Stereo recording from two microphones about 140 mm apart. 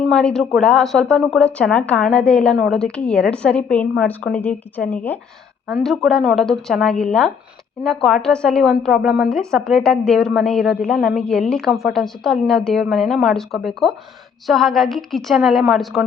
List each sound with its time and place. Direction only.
0.1 s a woman's voice: 5° left (ahead or behind)